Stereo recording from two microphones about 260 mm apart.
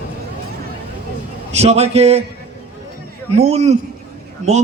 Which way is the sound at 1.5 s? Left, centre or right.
Right.